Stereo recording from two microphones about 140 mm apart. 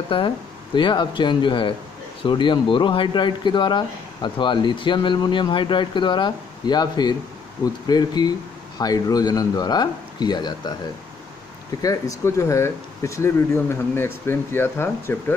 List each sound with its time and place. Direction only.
0.1 s speech: 40° left (ahead or behind)
11.8 s speech: 25° left (ahead or behind)